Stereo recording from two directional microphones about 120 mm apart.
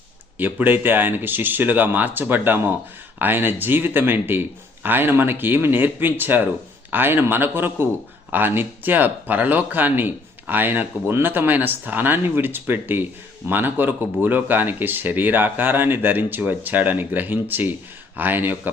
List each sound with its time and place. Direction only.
0.3 s speech: 15° right (ahead or behind)